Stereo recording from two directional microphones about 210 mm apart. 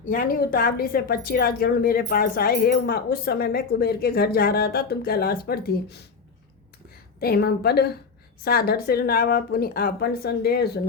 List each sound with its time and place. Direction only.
0.0 s speech: 40° left (ahead or behind)
7.2 s speech: 45° left (ahead or behind)